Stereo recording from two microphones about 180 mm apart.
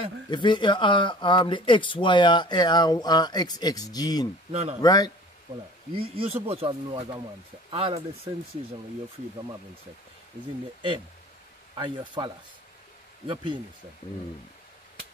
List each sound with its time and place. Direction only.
0.3 s speech: 25° left (ahead or behind)
4.5 s a man's voice: 35° right (ahead or behind)
4.8 s speech: 20° left (ahead or behind)
5.9 s speech: 30° right (ahead or behind)
11.7 s speech: 25° right (ahead or behind)
13.3 s speech: 25° right (ahead or behind)